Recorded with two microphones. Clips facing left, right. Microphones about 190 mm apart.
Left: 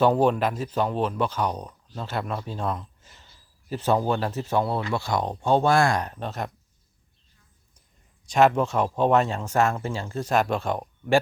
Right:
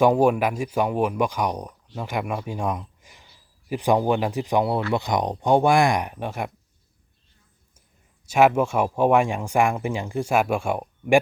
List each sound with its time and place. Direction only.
0.0 s a man's voice: 10° right (ahead or behind)
8.3 s speech: 10° right (ahead or behind)